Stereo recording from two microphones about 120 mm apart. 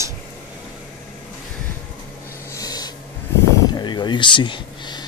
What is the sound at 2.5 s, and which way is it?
Snort, 30° left (ahead or behind).